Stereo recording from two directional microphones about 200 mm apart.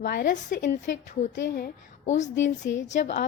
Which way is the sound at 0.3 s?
40° left (ahead or behind).